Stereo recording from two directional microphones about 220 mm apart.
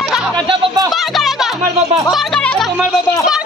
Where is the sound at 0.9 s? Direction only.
Centre (ahead or behind).